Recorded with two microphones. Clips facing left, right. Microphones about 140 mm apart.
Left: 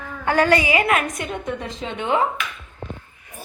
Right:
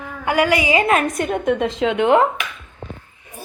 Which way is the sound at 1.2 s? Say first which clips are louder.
Right 8 dB; 55° right (ahead or behind).